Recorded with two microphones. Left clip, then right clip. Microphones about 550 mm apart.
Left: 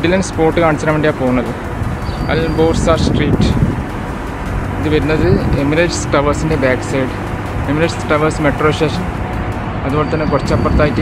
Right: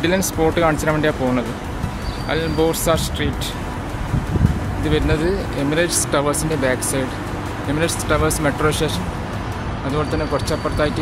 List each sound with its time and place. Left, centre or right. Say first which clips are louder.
0.0 s speech: left 4 dB; right
4.8 s speech: left 5 dB; right
9.9 s speech: left 6 dB; right